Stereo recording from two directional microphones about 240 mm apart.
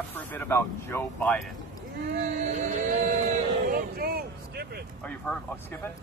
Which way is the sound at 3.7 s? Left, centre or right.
Right.